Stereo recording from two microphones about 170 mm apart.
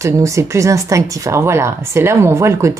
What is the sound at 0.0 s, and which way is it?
A woman's voice, 20° right (ahead or behind).